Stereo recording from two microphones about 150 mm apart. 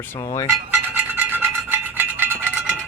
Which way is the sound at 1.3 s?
15° right (ahead or behind).